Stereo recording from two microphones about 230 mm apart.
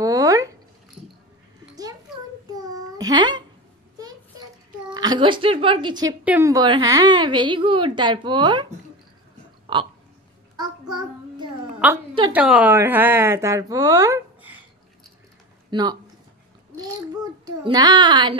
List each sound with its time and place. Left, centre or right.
0.0 s a sound: centre
2.5 s babbling: centre
4.9 s a woman's voice: centre
10.6 s child singing: centre
11.8 s a woman's voice: centre
15.7 s a woman's voice: centre
17.2 s a woman's voice: centre